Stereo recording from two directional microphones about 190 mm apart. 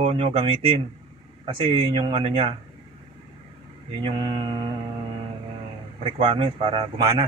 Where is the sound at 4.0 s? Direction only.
25° right (ahead or behind).